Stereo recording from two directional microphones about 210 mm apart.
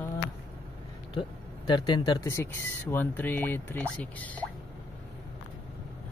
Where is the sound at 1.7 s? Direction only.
20° left (ahead or behind).